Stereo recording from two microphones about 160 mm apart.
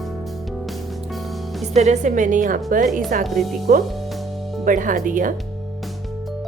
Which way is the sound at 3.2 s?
Centre (ahead or behind).